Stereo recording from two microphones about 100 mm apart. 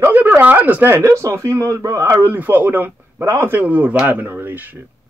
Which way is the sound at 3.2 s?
30° right (ahead or behind).